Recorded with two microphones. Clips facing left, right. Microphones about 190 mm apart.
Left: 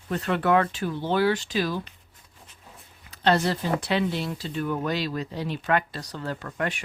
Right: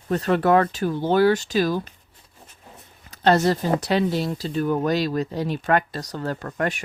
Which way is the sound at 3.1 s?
45° right (ahead or behind).